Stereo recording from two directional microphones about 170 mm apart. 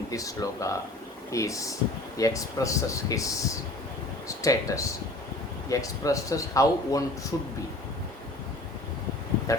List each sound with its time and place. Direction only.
0.1 s a man's voice: 20° left (ahead or behind)
4.3 s a man's voice: 20° left (ahead or behind)
9.5 s speech: 20° left (ahead or behind)